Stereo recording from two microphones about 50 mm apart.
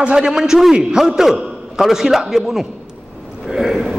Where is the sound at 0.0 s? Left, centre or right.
Centre.